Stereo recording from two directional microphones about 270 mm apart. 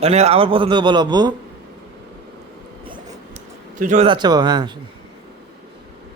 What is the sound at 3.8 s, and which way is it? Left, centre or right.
Speech, right.